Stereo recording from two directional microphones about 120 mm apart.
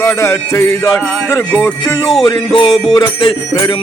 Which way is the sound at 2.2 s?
35° left (ahead or behind).